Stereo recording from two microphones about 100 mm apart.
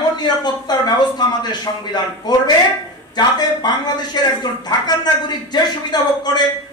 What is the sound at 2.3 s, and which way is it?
A man's voice, 45° left (ahead or behind).